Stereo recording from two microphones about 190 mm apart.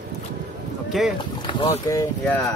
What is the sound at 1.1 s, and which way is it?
Speech, 25° left (ahead or behind).